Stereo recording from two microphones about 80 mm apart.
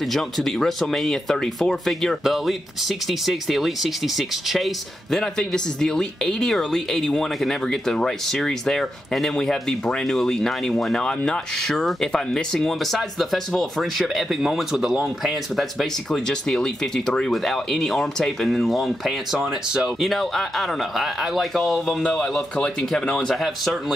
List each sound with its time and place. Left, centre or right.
0.0 s speech: centre